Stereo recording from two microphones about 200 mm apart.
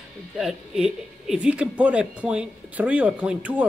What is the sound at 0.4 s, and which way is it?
Speech, 5° right (ahead or behind).